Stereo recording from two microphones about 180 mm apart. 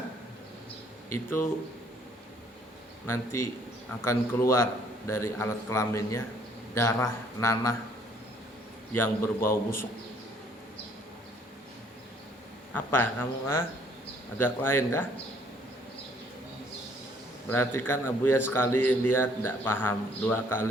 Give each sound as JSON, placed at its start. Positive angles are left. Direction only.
{"t": 1.1, "sound": "a man's voice", "side_deg": 15}
{"t": 3.1, "sound": "a man's voice", "side_deg": 15}
{"t": 8.9, "sound": "a man's voice", "side_deg": 15}
{"t": 12.7, "sound": "a man's voice", "side_deg": 10}
{"t": 17.5, "sound": "a man's voice", "side_deg": 10}